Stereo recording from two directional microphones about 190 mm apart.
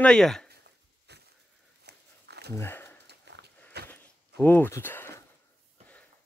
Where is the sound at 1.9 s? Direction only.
60° right (ahead or behind).